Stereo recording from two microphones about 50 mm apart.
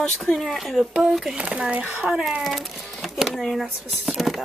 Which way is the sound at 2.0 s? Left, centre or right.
Centre.